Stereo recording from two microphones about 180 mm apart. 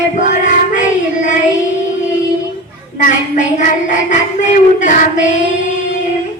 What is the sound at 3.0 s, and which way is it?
Speech, 45° left (ahead or behind).